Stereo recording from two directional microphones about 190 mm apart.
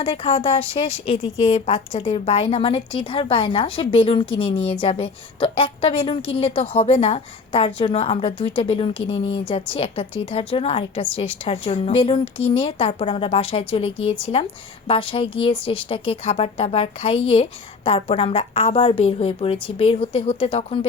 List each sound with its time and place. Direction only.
0.0 s a woman's voice: 30° left (ahead or behind)